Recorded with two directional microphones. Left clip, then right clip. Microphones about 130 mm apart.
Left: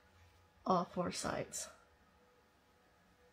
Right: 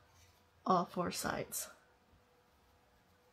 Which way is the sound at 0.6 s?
15° right (ahead or behind).